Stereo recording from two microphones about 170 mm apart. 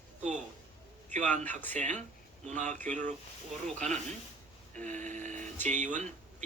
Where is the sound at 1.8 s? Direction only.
45° right (ahead or behind).